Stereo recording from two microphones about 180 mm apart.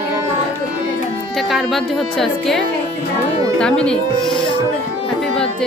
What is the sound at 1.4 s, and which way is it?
Speech, centre (ahead or behind).